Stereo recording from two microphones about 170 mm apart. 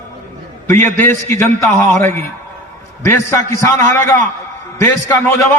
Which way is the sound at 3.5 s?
15° left (ahead or behind).